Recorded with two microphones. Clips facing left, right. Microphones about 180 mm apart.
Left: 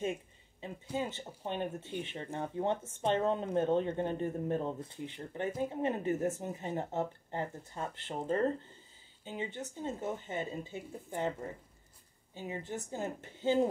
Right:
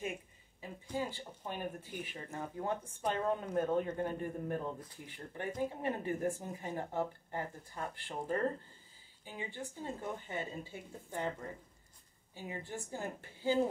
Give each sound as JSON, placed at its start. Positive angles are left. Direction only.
{"t": 0.6, "sound": "a sound", "side_deg": 25}
{"t": 0.9, "sound": "speech", "side_deg": 25}
{"t": 12.4, "sound": "speech", "side_deg": 20}